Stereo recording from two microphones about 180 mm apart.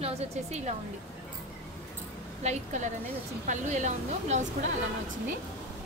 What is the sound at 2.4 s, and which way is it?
Speech, 40° right (ahead or behind).